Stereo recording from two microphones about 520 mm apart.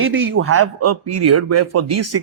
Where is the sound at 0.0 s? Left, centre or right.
Right.